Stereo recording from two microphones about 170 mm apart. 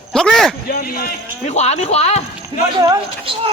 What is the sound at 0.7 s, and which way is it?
Speech, 60° left (ahead or behind).